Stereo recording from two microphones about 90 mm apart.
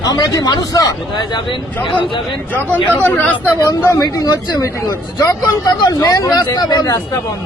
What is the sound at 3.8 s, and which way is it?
A man's voice, 40° left (ahead or behind).